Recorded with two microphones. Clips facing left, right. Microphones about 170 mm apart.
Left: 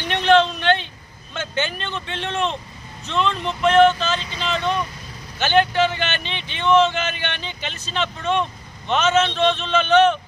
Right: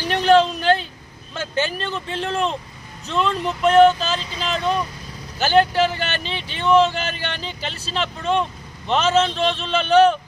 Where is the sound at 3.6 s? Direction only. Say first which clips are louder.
Right 1 dB; 35° right (ahead or behind).